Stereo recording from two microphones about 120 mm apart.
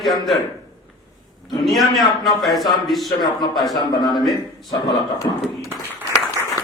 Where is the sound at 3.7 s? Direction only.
40° left (ahead or behind).